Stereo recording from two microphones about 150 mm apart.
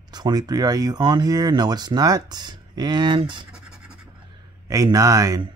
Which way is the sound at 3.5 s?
5° right (ahead or behind).